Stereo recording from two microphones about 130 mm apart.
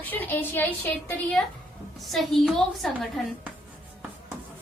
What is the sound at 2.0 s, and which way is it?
A woman's voice, centre (ahead or behind).